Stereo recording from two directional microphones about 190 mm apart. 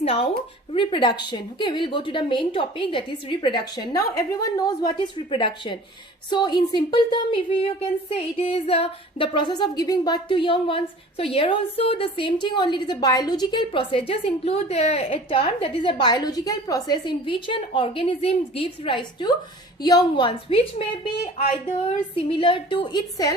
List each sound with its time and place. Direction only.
0.0 s a woman's voice: 30° left (ahead or behind)
22.3 s a woman's voice: 25° left (ahead or behind)